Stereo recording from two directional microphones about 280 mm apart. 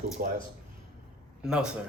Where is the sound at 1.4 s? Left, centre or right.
Centre.